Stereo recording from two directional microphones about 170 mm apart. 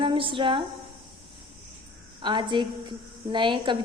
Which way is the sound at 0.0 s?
30° right (ahead or behind).